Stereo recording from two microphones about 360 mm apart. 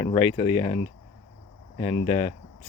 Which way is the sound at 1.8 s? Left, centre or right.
Centre.